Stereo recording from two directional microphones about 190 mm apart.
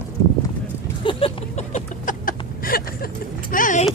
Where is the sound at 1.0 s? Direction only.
35° left (ahead or behind).